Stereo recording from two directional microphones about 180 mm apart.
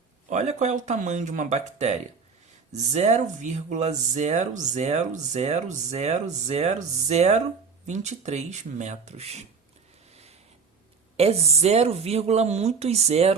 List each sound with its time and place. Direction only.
0.3 s speech: 40° right (ahead or behind)
11.2 s speech: 35° right (ahead or behind)